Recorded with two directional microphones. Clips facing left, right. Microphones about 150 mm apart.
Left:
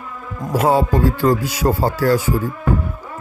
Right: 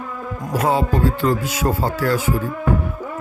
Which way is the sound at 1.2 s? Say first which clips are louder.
Left 3 dB; 35° left (ahead or behind).